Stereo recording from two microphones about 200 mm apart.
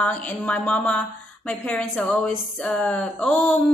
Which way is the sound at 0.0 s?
5° left (ahead or behind).